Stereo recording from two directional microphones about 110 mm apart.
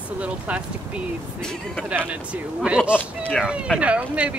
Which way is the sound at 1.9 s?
10° right (ahead or behind).